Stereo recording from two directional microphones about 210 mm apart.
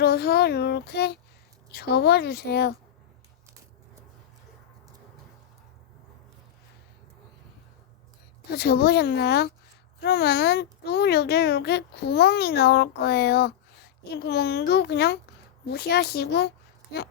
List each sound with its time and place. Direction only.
0.0 s a child's voice: 50° left (ahead or behind)
8.4 s a child's voice: 50° left (ahead or behind)